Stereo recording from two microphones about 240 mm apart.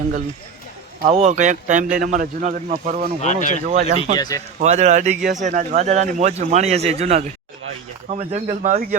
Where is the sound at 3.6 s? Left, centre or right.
Right.